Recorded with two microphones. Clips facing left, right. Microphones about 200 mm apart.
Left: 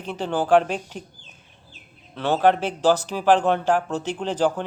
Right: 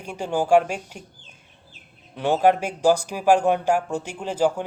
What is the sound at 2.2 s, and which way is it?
Speech, 15° right (ahead or behind).